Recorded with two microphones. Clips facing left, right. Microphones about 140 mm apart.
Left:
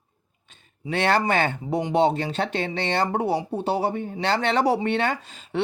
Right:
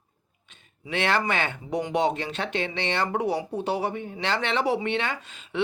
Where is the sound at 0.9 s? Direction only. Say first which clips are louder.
Left 4 dB; 40° left (ahead or behind).